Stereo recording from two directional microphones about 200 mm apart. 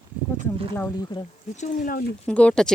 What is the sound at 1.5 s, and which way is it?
Speech, 40° left (ahead or behind).